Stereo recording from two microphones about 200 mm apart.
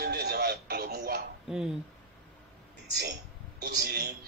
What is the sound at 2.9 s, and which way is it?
A man's voice, 55° right (ahead or behind).